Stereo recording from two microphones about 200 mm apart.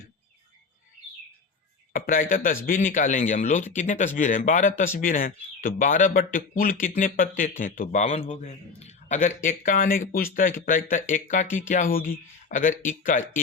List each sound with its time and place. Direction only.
1.9 s a man's voice: 45° left (ahead or behind)
11.4 s speech: 10° left (ahead or behind)
11.7 s a man's voice: 45° left (ahead or behind)